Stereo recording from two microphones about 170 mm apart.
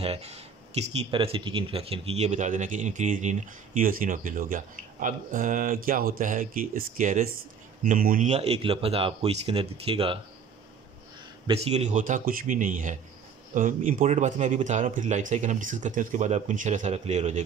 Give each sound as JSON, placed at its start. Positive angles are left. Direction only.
{"t": 0.0, "sound": "speech", "side_deg": -35}
{"t": 8.3, "sound": "speech", "side_deg": -35}
{"t": 11.4, "sound": "speech", "side_deg": -35}